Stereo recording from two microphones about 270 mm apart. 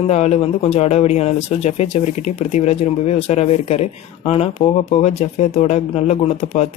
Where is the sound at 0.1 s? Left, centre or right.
Left.